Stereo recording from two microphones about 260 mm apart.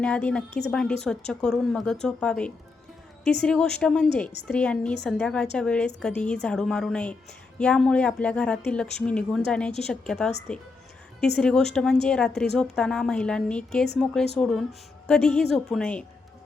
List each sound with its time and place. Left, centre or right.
0.0 s speech: centre
11.3 s speech: centre